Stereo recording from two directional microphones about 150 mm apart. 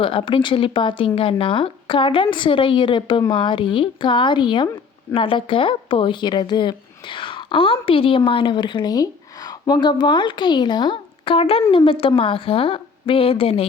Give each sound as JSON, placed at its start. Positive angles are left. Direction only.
{"t": 0.0, "sound": "a woman's voice", "side_deg": 35}